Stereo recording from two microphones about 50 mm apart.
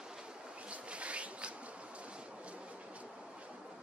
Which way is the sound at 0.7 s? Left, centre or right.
Right.